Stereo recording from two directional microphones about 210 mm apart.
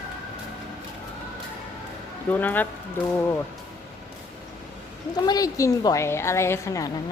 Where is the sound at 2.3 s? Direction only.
10° left (ahead or behind).